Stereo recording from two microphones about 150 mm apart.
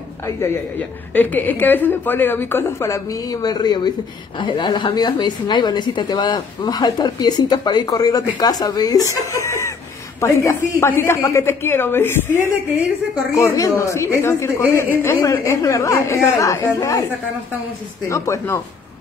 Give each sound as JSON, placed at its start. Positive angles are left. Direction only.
{"t": 1.1, "sound": "a woman's voice", "side_deg": 10}
{"t": 18.0, "sound": "a woman's voice", "side_deg": 20}